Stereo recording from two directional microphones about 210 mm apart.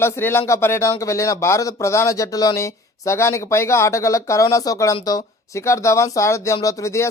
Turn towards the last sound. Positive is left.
turn(degrees=15)  # may be behind; listen again after turning